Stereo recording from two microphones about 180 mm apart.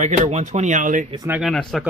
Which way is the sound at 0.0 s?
40° right (ahead or behind).